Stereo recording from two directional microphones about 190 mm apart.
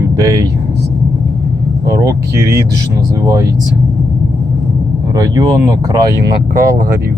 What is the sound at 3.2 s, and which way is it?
Speech, 15° right (ahead or behind).